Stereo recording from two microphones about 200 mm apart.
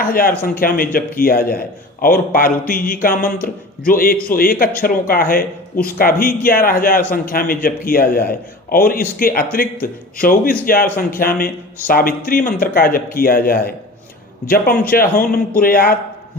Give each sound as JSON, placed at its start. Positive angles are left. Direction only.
{"t": 0.0, "sound": "speech", "side_deg": 45}